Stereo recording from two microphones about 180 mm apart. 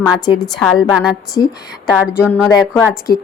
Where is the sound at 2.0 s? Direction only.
5° right (ahead or behind).